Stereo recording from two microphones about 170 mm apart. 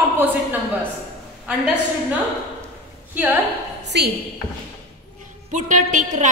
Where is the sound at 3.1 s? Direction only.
10° right (ahead or behind).